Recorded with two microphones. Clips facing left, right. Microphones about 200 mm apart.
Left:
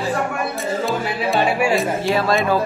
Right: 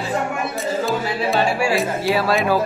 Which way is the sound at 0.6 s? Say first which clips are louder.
Right 1 dB; centre (ahead or behind).